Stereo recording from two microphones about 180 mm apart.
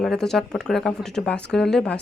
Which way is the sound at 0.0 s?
Centre (ahead or behind).